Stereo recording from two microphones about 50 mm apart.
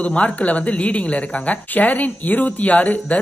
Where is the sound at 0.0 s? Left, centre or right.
Left.